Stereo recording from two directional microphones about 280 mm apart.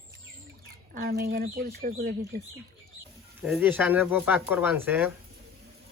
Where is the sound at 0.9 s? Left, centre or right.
Right.